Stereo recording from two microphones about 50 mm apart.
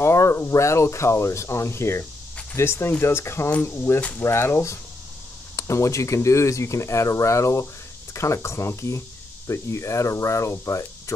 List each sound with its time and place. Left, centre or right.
0.0 s cricket: left
0.5 s speech: left
5.6 s speech: left
8.1 s speech: left